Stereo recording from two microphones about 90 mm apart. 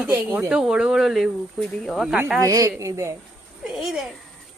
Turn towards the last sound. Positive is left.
turn(degrees=-5)  # may be behind; listen again after turning